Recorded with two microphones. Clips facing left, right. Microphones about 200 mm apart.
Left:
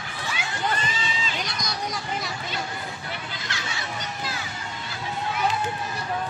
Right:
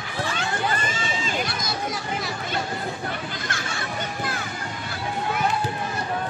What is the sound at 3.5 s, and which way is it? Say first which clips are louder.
Music: right 3 dB; 50° right (ahead or behind).